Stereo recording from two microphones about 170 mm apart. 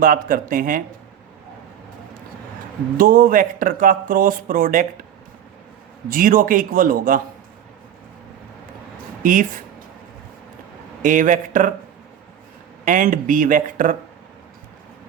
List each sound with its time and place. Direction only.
0.0 s speech: 55° right (ahead or behind)
3.0 s speech: 55° right (ahead or behind)
6.1 s speech: 55° right (ahead or behind)
9.2 s speech: 50° right (ahead or behind)
11.0 s speech: 50° right (ahead or behind)
12.8 s speech: 50° right (ahead or behind)